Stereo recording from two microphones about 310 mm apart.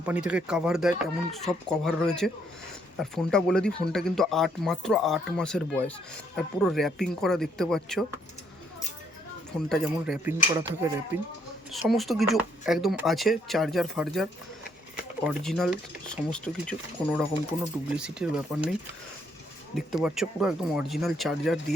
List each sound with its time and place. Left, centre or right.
0.0 s speech: centre
9.6 s speech: centre
10.5 s cutlery: centre
11.7 s speech: centre
19.7 s speech: centre